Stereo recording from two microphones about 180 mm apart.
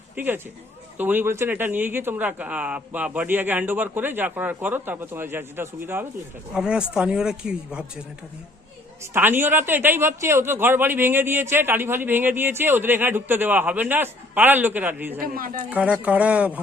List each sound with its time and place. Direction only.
0.2 s a man's voice: 10° right (ahead or behind)
9.1 s a man's voice: 10° right (ahead or behind)
15.2 s speech: 50° right (ahead or behind)
15.7 s a man's voice: 5° right (ahead or behind)